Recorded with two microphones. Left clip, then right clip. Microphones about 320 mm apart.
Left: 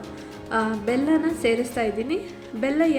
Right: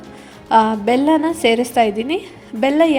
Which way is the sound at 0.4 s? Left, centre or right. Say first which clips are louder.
Right 11 dB; right.